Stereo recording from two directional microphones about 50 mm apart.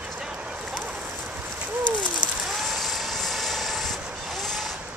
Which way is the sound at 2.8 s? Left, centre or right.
Centre.